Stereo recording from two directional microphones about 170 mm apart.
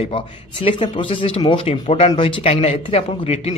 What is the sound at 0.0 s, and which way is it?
Speech, 30° left (ahead or behind).